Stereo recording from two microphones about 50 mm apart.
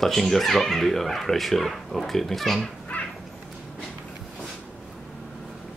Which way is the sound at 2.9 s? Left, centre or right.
Left.